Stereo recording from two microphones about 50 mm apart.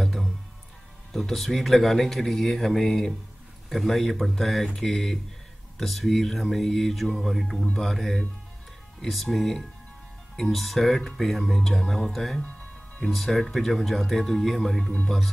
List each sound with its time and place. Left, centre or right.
0.0 s music: centre
1.1 s speech: centre
12.4 s speech: left
13.1 s speech: centre